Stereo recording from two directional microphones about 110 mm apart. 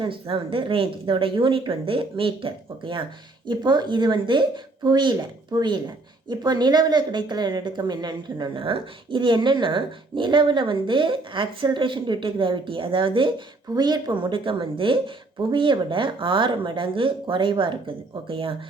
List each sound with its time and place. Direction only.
0.0 s speech: 55° right (ahead or behind)